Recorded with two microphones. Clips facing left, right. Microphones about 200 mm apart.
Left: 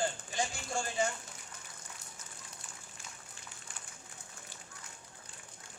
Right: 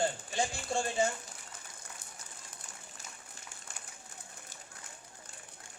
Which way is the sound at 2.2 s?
30° right (ahead or behind).